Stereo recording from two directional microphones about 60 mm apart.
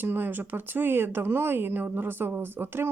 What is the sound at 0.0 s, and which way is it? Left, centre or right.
Speech, right.